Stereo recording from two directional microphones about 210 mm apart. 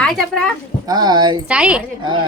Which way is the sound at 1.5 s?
5° right (ahead or behind).